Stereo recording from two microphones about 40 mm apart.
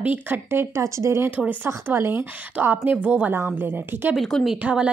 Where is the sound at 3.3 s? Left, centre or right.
Right.